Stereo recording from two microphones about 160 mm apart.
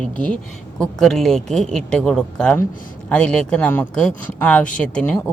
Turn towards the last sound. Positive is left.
turn(degrees=10)  # may be behind; listen again after turning